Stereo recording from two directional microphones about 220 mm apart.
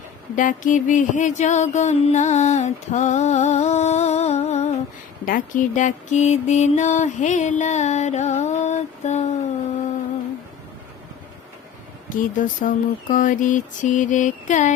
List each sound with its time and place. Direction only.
0.3 s music: 35° left (ahead or behind)
12.0 s music: 35° left (ahead or behind)